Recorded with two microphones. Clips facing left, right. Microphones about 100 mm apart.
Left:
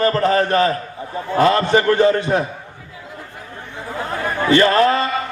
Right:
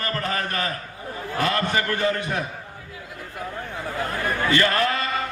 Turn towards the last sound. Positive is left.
turn(degrees=30)  # may be behind; listen again after turning